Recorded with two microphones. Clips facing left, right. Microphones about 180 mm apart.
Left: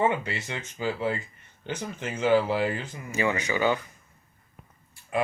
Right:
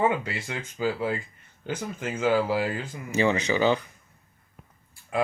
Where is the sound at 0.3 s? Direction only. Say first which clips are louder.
Right 2 dB; 25° left (ahead or behind).